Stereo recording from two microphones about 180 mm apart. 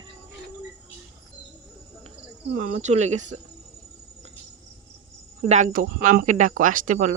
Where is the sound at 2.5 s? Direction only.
45° right (ahead or behind).